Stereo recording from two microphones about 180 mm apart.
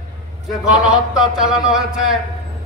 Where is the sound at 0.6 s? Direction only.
5° right (ahead or behind).